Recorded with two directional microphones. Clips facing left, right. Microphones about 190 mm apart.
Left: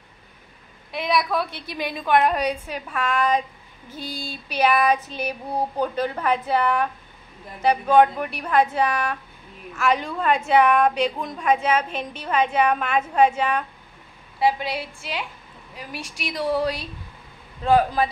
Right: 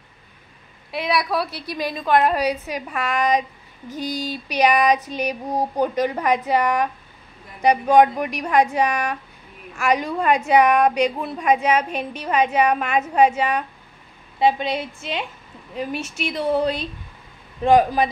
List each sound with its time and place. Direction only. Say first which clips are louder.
0.9 s a woman's voice: right 1 dB; centre (ahead or behind)
14.4 s a woman's voice: right 3 dB; 20° right (ahead or behind)